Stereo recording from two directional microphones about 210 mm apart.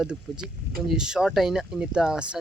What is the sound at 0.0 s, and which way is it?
Speech, 5° right (ahead or behind).